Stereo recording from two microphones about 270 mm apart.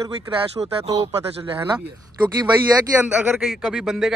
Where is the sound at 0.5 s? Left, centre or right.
Right.